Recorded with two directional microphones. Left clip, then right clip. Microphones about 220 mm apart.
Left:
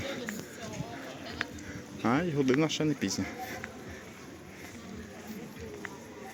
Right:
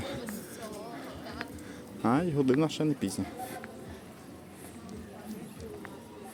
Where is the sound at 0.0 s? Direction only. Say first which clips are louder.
Left 2 dB; 10° right (ahead or behind).